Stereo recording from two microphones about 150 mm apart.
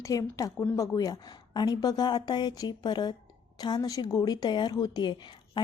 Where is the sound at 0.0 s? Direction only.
25° left (ahead or behind).